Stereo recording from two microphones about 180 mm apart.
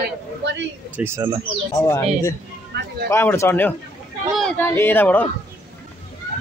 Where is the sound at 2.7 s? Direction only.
70° right (ahead or behind).